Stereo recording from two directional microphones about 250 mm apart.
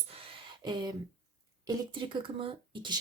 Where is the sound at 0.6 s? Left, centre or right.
Centre.